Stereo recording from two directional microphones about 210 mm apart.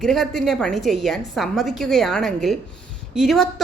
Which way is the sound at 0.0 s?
Centre (ahead or behind).